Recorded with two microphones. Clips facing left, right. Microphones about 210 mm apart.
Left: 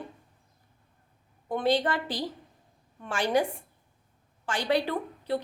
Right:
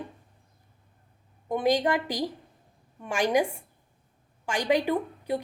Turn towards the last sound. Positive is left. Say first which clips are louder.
# right 3 dB
turn(degrees=-15)  # may be behind; listen again after turning